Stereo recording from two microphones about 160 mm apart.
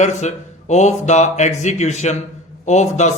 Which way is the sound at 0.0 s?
45° left (ahead or behind).